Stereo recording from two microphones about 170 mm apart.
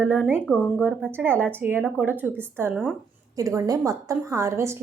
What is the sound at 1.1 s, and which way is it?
A woman's voice, 10° right (ahead or behind).